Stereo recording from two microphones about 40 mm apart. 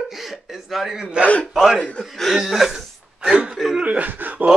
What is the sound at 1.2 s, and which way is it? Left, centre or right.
Speech, right.